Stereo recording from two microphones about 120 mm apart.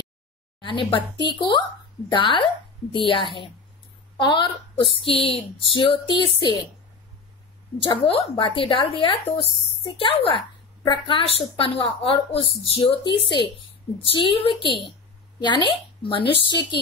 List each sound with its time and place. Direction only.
0.6 s a woman's voice: 45° left (ahead or behind)
7.8 s a woman's voice: 45° left (ahead or behind)